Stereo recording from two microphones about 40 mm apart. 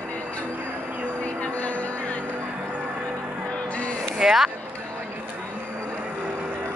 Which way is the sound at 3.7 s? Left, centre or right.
Left.